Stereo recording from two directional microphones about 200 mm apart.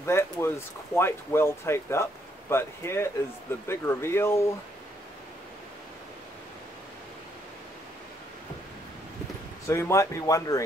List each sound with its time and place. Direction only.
0.0 s speech: 15° left (ahead or behind)
9.7 s speech: 15° left (ahead or behind)